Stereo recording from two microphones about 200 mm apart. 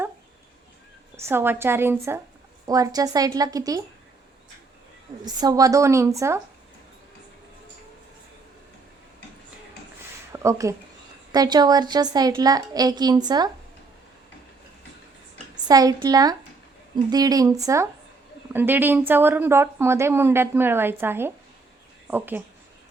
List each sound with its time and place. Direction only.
1.1 s speech: 10° right (ahead or behind)
5.2 s speech: 20° right (ahead or behind)
10.3 s a child's voice: 15° right (ahead or behind)
15.6 s a child's voice: 20° right (ahead or behind)